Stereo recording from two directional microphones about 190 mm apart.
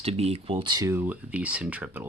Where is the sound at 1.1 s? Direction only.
10° right (ahead or behind).